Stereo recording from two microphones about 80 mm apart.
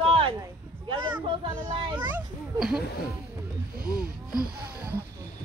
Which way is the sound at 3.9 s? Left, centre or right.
Left.